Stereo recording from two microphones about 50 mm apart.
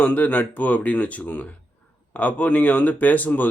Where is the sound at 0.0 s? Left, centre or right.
Left.